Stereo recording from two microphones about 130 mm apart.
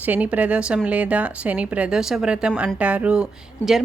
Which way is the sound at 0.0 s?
10° right (ahead or behind).